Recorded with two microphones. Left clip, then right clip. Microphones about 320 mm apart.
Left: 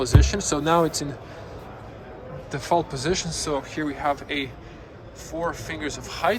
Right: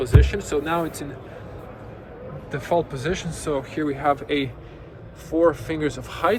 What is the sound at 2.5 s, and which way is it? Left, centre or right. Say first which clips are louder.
A man's voice: even; centre.